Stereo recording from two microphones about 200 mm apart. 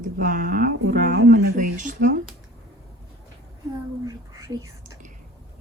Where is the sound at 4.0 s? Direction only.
15° right (ahead or behind).